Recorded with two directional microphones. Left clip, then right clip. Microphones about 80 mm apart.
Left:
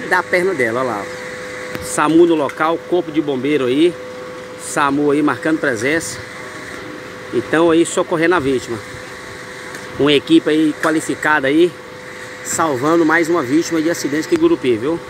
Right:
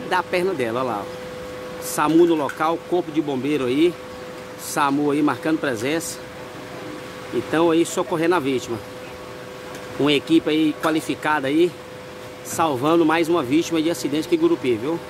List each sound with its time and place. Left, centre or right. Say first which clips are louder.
0.1 s speech: left 6 dB; left
2.0 s speech: left 4 dB; centre
7.5 s speech: left 5 dB; centre
10.0 s speech: left 6 dB; centre